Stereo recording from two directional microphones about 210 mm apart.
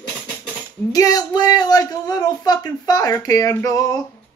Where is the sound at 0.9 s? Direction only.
15° left (ahead or behind).